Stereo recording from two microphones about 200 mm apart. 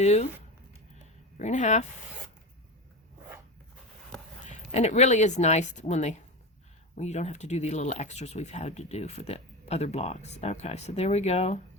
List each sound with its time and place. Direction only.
0.0 s speech: 35° left (ahead or behind)
1.4 s speech: 35° left (ahead or behind)
4.4 s speech: 35° left (ahead or behind)